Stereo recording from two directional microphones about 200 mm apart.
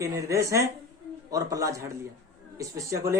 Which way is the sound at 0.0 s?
15° right (ahead or behind).